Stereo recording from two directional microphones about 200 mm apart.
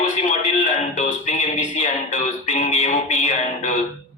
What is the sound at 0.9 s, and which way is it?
Music, 35° left (ahead or behind).